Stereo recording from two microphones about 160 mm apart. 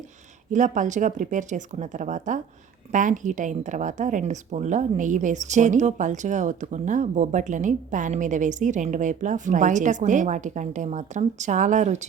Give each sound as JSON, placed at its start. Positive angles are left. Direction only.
{"t": 0.5, "sound": "speech", "side_deg": -50}